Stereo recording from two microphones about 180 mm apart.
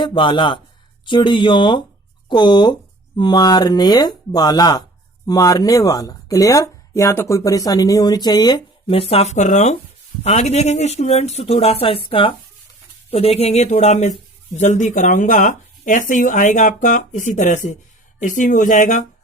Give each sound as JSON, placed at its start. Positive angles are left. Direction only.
{"t": 0.0, "sound": "speech", "side_deg": 25}